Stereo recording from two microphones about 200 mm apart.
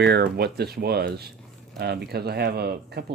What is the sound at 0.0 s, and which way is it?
Speech, 55° right (ahead or behind).